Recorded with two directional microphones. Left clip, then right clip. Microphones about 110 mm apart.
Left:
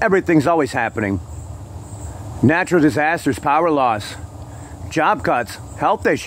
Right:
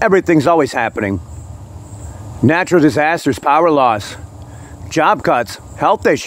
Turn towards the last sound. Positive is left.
turn(degrees=-30)  # may be behind; listen again after turning